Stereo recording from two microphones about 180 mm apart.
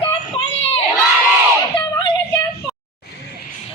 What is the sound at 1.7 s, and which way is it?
Music, 25° left (ahead or behind).